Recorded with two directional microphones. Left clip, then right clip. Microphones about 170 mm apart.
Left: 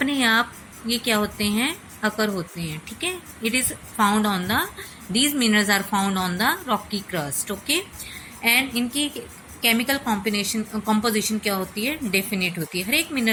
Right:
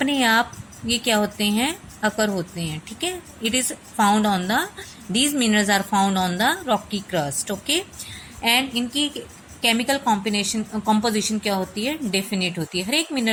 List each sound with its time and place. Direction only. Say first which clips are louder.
0.0 s a woman's voice: right 1 dB; 50° right (ahead or behind)